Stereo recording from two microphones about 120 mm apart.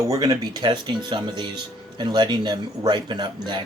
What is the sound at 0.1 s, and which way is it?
Speech, 35° right (ahead or behind).